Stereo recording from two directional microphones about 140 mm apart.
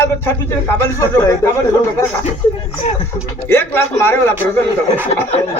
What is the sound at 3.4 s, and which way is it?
Speech, 15° left (ahead or behind).